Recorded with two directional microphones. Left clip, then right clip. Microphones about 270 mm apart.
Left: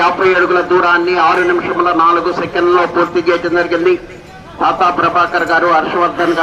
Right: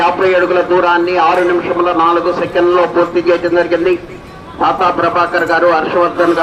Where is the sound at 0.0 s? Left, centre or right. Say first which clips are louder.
Even; centre.